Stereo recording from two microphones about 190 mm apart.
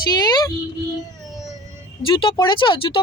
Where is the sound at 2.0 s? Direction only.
25° left (ahead or behind).